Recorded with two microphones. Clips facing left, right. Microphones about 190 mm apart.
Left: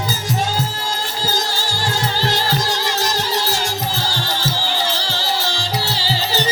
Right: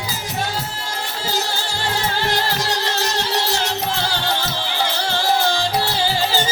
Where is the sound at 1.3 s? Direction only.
65° right (ahead or behind).